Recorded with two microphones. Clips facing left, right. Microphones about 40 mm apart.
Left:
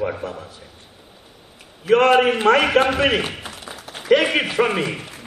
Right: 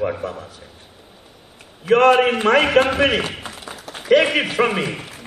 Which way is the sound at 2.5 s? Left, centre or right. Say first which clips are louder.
Right 2 dB; centre.